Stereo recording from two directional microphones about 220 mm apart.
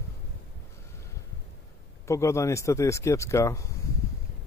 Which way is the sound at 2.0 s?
15° left (ahead or behind).